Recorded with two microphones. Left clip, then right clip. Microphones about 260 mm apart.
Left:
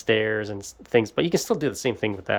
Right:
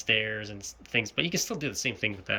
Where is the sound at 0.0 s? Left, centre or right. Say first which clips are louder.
Left 5 dB; centre.